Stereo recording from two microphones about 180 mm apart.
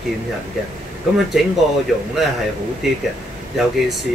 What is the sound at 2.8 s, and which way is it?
Speech, centre (ahead or behind).